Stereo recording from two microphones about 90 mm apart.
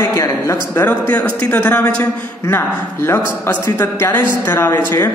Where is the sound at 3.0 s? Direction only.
25° left (ahead or behind).